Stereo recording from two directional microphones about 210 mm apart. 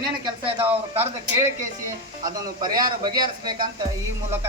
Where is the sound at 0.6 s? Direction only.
10° right (ahead or behind).